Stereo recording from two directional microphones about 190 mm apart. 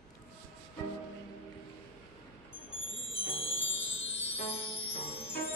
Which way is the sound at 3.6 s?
85° left.